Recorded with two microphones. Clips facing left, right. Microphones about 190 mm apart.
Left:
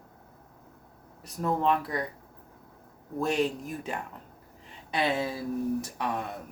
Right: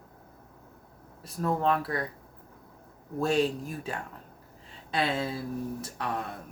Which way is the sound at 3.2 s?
15° left (ahead or behind).